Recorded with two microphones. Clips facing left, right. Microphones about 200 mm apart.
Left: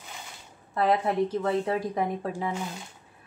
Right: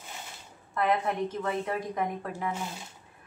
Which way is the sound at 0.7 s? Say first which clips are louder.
Left 3 dB; 35° left (ahead or behind).